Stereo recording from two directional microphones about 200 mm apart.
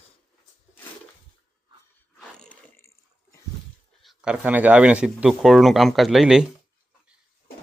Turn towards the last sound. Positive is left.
turn(degrees=0)  # may be behind; listen again after turning